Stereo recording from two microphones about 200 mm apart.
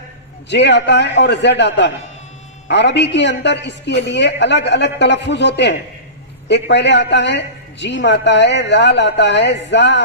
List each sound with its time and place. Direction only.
0.5 s a man's voice: 60° left (ahead or behind)